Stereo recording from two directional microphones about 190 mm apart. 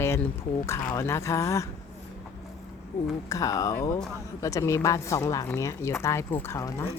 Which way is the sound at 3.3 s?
15° left (ahead or behind).